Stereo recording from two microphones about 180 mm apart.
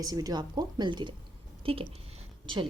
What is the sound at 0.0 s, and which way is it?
Speech, 20° right (ahead or behind).